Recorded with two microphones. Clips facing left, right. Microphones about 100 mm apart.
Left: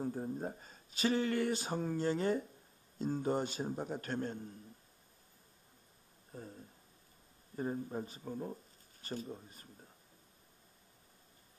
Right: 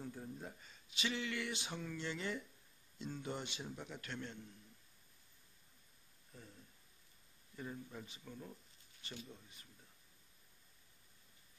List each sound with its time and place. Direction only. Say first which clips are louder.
0.0 s a man's voice: left 10 dB; 40° left (ahead or behind)
6.3 s speech: left 10 dB; 40° left (ahead or behind)